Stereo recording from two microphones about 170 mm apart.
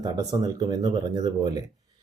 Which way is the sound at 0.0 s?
20° right (ahead or behind).